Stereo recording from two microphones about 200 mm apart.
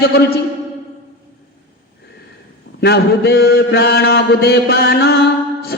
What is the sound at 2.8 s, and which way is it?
A man's voice, 55° left (ahead or behind).